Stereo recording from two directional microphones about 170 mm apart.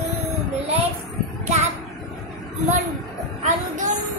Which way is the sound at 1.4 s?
40° right (ahead or behind).